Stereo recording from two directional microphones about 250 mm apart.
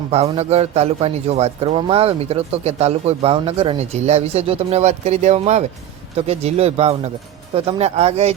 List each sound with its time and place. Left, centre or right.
0.1 s a man's voice: right